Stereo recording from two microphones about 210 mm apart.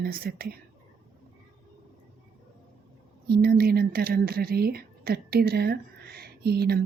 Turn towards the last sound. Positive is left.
turn(degrees=-50)  # may be behind; listen again after turning